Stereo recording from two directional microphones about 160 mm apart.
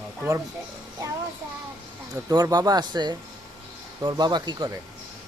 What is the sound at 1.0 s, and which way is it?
Child singing, 20° right (ahead or behind).